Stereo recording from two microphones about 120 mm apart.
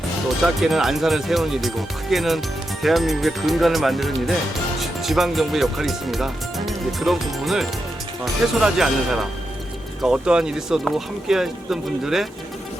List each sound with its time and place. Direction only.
0.4 s speech: 5° right (ahead or behind)